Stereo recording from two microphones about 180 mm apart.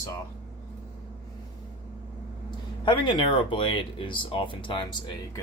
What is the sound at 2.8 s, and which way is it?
Speech, 25° left (ahead or behind).